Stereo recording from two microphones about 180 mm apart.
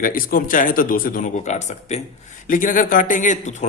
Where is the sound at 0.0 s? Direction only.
50° left (ahead or behind).